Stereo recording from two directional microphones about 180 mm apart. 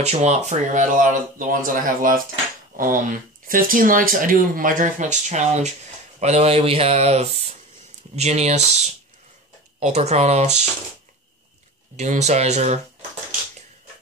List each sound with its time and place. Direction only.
0.0 s speech: 40° right (ahead or behind)
12.0 s speech: 40° right (ahead or behind)